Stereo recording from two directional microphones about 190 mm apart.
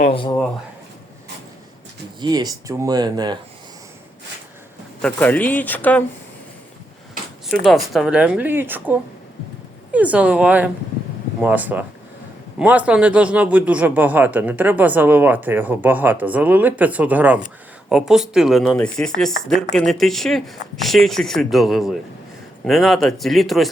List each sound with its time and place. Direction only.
0.1 s speech: 25° left (ahead or behind)
2.2 s speech: 20° right (ahead or behind)
5.0 s speech: 5° left (ahead or behind)
7.4 s a man's voice: centre (ahead or behind)